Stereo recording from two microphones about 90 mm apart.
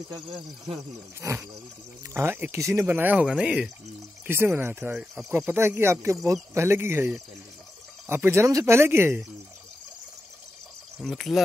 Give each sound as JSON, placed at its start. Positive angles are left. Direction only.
{"t": 0.1, "sound": "speech", "side_deg": -60}
{"t": 1.2, "sound": "speech", "side_deg": -40}
{"t": 2.1, "sound": "speech", "side_deg": -25}
{"t": 4.3, "sound": "speech", "side_deg": -25}
{"t": 8.1, "sound": "speech", "side_deg": -25}
{"t": 11.0, "sound": "speech", "side_deg": 0}